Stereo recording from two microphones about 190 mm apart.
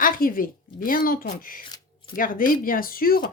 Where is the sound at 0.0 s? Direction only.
50° left (ahead or behind).